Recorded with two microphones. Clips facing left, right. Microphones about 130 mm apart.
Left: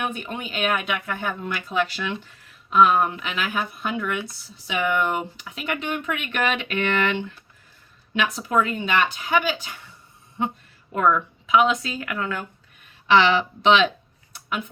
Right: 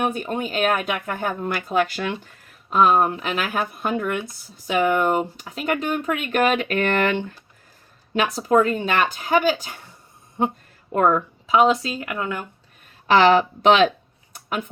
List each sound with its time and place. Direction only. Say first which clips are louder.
0.0 s speech: right 5 dB; 40° right (ahead or behind)
10.9 s speech: right 2 dB; 40° right (ahead or behind); by 12.5 s 20° right (ahead or behind)
13.1 s speech: right 3 dB; 45° right (ahead or behind)
14.3 s a sound: right 2 dB; 45° right (ahead or behind)